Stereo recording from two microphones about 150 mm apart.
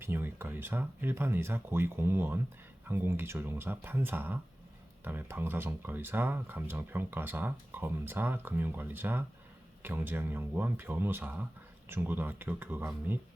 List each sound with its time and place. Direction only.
0.0 s speech: 15° right (ahead or behind)